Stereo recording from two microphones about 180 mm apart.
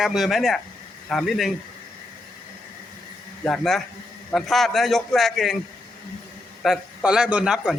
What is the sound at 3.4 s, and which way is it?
A man's voice, centre (ahead or behind).